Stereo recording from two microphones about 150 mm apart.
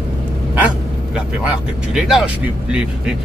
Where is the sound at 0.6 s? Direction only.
10° right (ahead or behind).